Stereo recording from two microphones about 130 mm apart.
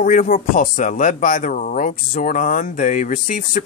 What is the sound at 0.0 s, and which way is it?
Speech, 90° left.